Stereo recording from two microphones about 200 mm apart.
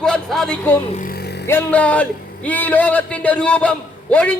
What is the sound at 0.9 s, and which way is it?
Vehicle, 45° left (ahead or behind).